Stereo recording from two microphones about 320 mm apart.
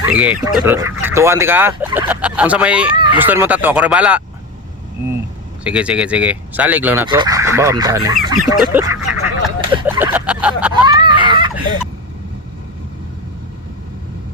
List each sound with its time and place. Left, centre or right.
0.1 s speech: centre
5.6 s speech: centre
9.7 s a sound: centre